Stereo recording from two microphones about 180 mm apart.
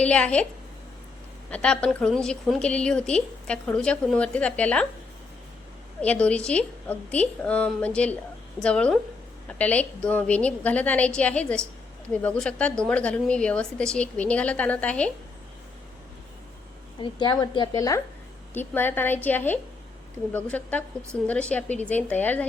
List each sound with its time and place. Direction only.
0.0 s speech: 5° left (ahead or behind)
1.5 s a woman's voice: 5° left (ahead or behind)
6.0 s a woman's voice: 5° left (ahead or behind)
17.0 s a woman's voice: 25° left (ahead or behind)